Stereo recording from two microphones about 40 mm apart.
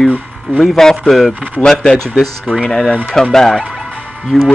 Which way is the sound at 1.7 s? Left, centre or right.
Centre.